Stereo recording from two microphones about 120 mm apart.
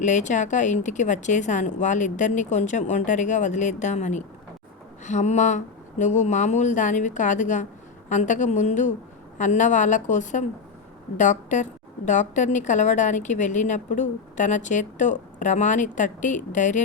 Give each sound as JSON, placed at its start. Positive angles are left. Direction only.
{"t": 0.0, "sound": "a woman's voice", "side_deg": 90}